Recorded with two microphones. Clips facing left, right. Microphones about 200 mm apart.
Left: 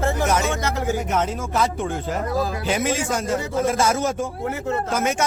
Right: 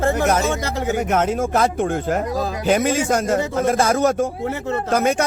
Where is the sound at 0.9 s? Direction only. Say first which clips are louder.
Right 4 dB; 50° right (ahead or behind).